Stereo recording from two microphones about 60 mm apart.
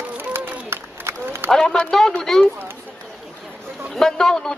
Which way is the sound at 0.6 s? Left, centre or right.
Right.